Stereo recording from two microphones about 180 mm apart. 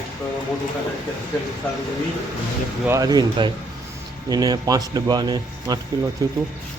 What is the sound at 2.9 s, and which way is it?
Speech, 20° right (ahead or behind).